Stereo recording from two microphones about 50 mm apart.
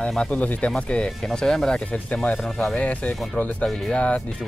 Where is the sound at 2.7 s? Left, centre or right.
Left.